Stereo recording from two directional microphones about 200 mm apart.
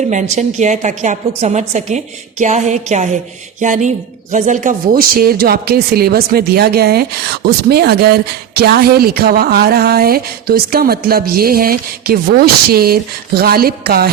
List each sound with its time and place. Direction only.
0.0 s a woman's voice: 35° right (ahead or behind)